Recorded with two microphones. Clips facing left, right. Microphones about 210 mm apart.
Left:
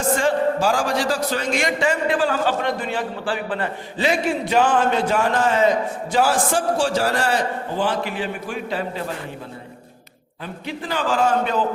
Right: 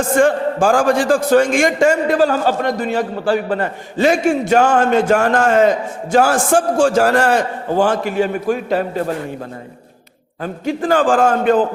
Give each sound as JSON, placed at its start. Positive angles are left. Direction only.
{"t": 0.2, "sound": "a man's voice", "side_deg": -50}
{"t": 10.4, "sound": "a man's voice", "side_deg": -45}